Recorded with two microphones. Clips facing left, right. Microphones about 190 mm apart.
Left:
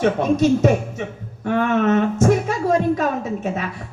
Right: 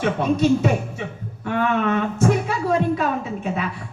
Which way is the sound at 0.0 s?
45° left (ahead or behind).